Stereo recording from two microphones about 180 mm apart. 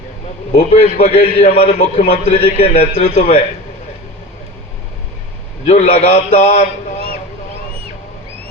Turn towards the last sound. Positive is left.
turn(degrees=35)  # may be behind; listen again after turning